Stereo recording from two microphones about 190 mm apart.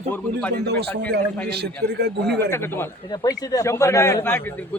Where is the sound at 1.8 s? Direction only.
55° right (ahead or behind).